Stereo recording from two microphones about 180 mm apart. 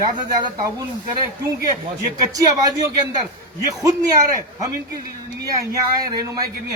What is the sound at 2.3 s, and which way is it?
Speech, 20° right (ahead or behind).